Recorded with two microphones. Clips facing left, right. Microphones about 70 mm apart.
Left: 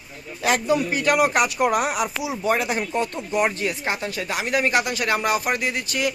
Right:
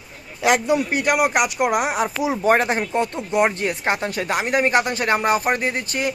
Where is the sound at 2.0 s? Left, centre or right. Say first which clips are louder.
Right 4 dB; right.